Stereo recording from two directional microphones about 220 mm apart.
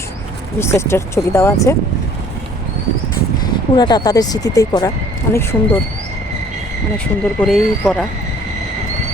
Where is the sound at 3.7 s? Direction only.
20° left (ahead or behind).